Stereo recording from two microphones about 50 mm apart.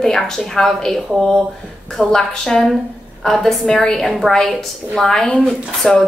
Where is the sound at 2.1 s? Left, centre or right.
Centre.